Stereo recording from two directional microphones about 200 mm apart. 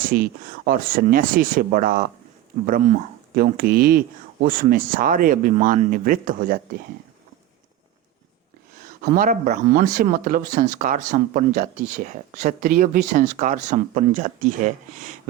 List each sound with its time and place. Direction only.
0.0 s speech: 45° right (ahead or behind)
8.8 s speech: 45° right (ahead or behind)